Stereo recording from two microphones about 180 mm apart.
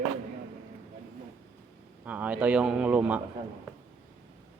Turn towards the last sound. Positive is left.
turn(degrees=-5)  # may be behind; listen again after turning